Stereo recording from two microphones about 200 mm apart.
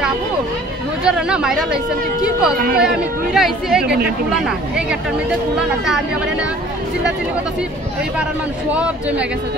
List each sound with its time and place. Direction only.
1.0 s speech: 5° right (ahead or behind)
3.8 s speech: 55° right (ahead or behind)
4.3 s speech: 5° right (ahead or behind)
8.7 s speech: 5° right (ahead or behind)